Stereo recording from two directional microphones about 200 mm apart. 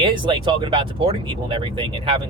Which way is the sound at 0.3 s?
25° right (ahead or behind).